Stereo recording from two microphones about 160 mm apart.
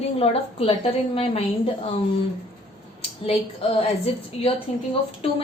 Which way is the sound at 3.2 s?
35° left (ahead or behind).